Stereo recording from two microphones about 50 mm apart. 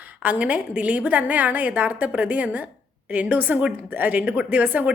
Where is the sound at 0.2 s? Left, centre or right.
Right.